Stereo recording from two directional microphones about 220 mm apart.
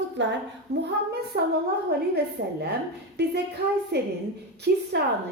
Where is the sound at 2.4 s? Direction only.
45° right (ahead or behind).